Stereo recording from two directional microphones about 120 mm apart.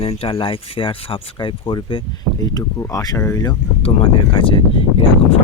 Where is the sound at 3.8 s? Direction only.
50° left (ahead or behind).